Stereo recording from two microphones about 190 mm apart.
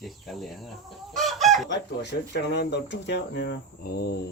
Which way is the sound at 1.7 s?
60° left (ahead or behind).